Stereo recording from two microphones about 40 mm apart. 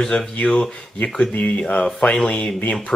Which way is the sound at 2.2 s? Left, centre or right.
Left.